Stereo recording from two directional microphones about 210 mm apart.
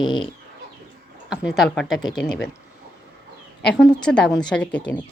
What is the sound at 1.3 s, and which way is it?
Speech, centre (ahead or behind).